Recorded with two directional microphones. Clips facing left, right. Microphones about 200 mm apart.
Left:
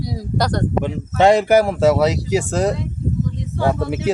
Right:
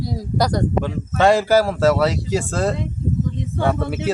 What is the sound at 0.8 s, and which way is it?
Speech, 20° left (ahead or behind).